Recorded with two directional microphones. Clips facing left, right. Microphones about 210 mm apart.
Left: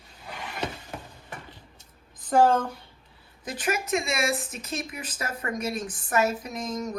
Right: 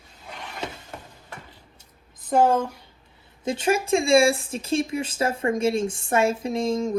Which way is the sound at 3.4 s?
25° right (ahead or behind).